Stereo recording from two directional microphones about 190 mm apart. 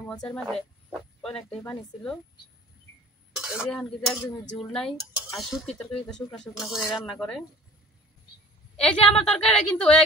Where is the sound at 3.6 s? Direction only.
Centre (ahead or behind).